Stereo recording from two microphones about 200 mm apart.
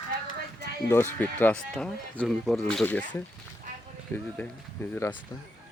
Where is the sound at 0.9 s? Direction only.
10° left (ahead or behind).